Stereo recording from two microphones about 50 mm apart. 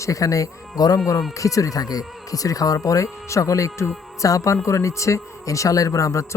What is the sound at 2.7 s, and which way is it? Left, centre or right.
Speech, left.